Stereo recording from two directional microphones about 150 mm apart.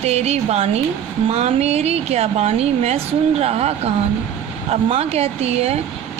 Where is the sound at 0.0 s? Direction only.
45° right (ahead or behind).